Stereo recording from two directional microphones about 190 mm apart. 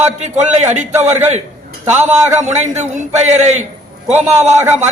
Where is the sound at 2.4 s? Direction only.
40° right (ahead or behind).